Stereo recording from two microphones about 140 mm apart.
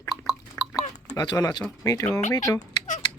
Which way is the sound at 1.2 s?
30° left (ahead or behind).